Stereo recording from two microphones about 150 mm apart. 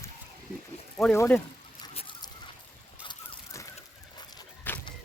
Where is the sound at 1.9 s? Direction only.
35° left (ahead or behind).